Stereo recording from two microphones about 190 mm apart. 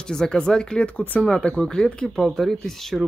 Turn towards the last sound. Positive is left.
turn(degrees=0)  # may be behind; listen again after turning